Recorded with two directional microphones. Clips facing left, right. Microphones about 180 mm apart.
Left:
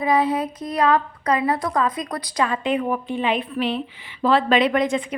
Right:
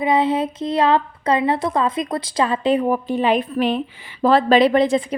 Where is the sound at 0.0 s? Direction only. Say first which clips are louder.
Right 2 dB; 25° right (ahead or behind).